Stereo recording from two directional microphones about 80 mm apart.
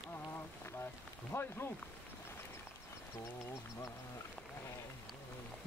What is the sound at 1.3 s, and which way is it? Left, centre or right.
Speech, left.